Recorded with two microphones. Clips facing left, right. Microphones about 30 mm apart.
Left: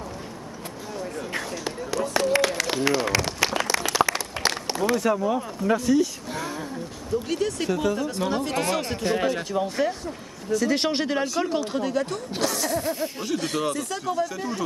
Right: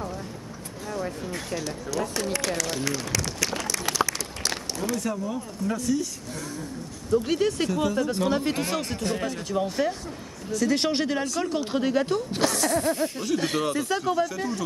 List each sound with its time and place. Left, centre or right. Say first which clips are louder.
2.3 s applause: left 5 dB; left
3.9 s a sound: left 4 dB; left
5.1 s speech: left 7 dB; left
5.8 s speech: left 5 dB; centre
7.2 s speech: right 2 dB; centre
7.6 s speech: even; centre
9.5 s speech: left 1 dB; centre
11.7 s speech: right 2 dB; centre
12.4 s speech: right 1 dB; centre
14.2 s speech: right 1 dB; centre